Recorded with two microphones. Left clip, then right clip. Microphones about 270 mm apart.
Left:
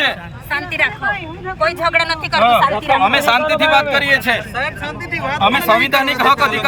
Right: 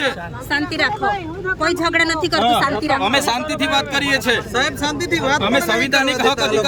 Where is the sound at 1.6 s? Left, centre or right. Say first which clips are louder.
Left 3 dB; centre.